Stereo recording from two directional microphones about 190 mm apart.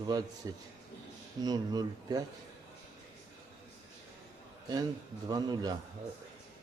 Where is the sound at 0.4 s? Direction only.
20° right (ahead or behind).